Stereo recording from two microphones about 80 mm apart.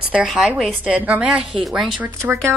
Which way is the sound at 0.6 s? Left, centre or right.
Centre.